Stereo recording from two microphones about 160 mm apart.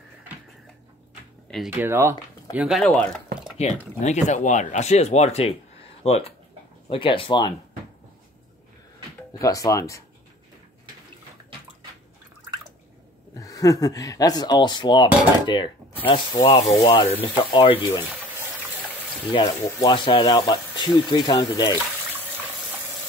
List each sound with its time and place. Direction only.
1.7 s speech: 15° right (ahead or behind)
2.5 s speech: 5° right (ahead or behind)
3.5 s speech: 45° left (ahead or behind); by 7.5 s 30° left (ahead or behind)
9.4 s speech: 20° left (ahead or behind)
13.4 s speech: 20° left (ahead or behind)
19.6 s speech: 25° left (ahead or behind)